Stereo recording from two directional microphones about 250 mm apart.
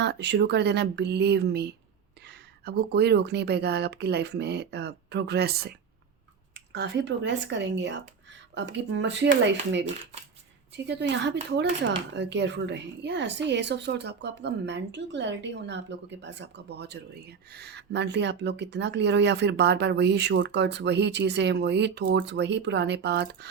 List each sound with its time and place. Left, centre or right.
0.0 s speech: right
10.8 s speech: right